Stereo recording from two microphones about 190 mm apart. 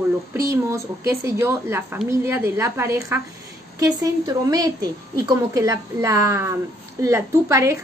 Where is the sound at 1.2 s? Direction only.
15° right (ahead or behind).